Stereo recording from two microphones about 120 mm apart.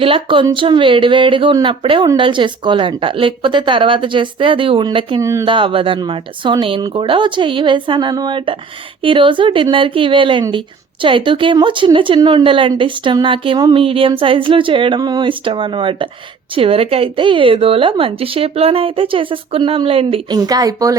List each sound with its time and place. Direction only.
0.0 s speech: 45° right (ahead or behind)
5.2 s speech: 25° right (ahead or behind)
5.5 s speech: 45° right (ahead or behind)
20.3 s speech: 35° right (ahead or behind)